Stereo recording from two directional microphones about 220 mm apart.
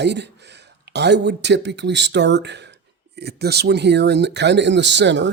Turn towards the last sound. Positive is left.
turn(degrees=-55)  # may be behind; listen again after turning